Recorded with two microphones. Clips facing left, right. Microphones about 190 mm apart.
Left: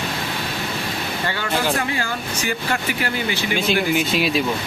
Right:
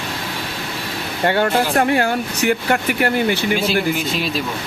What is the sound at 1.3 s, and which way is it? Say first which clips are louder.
Speech: right 7 dB; 55° right (ahead or behind).